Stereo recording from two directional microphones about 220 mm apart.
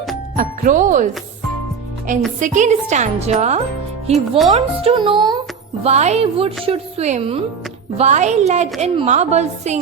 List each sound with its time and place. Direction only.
0.3 s a woman's voice: 35° right (ahead or behind)
2.1 s a woman's voice: 35° right (ahead or behind)